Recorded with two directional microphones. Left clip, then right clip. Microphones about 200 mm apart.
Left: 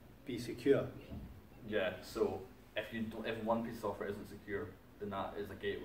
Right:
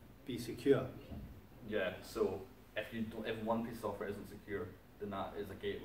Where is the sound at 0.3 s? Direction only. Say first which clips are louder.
Even; 15° right (ahead or behind).